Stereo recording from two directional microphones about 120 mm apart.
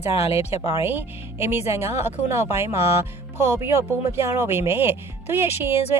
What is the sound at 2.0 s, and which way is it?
Speech, 65° left (ahead or behind).